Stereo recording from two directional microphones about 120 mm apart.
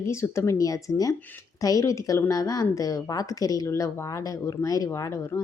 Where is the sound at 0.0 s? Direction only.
25° left (ahead or behind).